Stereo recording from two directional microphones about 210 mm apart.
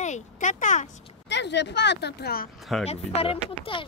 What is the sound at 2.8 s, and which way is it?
Speech, 30° left (ahead or behind).